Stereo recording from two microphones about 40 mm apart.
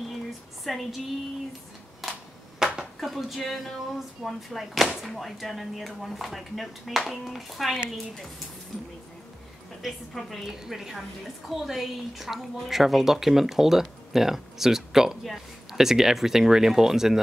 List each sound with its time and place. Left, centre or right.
0.7 s speech: centre
2.6 s a sound: centre
3.0 s speech: centre
9.8 s a woman's voice: centre